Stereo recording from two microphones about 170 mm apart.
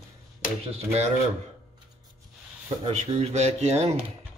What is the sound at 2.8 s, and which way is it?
Speech, 40° right (ahead or behind).